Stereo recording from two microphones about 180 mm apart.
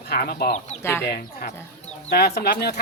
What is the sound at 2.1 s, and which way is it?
Speech, 60° left (ahead or behind).